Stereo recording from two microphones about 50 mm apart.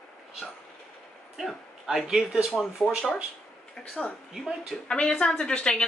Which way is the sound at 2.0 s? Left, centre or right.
Centre.